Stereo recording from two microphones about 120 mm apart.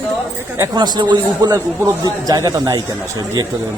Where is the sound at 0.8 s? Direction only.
40° right (ahead or behind).